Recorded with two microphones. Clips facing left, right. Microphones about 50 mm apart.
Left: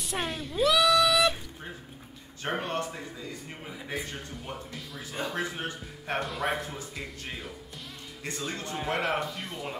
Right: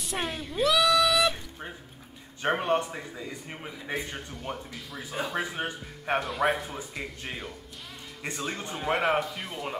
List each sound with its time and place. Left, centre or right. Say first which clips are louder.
0.0 s a sound: even; centre
2.4 s speech: right 5 dB; centre
4.4 s speech: right 2 dB; centre
5.3 s speech: right 2 dB; centre
6.1 s speech: right 4 dB; centre
8.2 s speech: right 2 dB; centre